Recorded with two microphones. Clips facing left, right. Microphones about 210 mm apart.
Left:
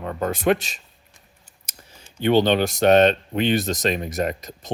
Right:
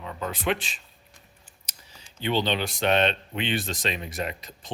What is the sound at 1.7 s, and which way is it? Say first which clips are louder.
Computer keyboard: left 7 dB; 50° left (ahead or behind).